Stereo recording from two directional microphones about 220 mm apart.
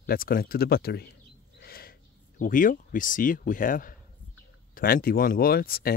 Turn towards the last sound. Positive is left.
turn(degrees=45)  # may be behind; listen again after turning